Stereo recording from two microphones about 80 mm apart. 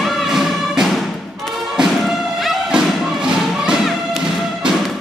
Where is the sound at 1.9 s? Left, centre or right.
Centre.